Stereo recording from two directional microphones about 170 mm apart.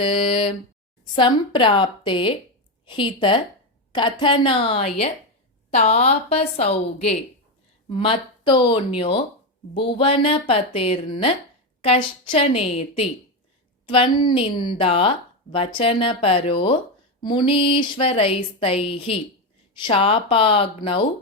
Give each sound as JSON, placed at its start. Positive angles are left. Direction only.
{"t": 0.0, "sound": "a woman's voice", "side_deg": 30}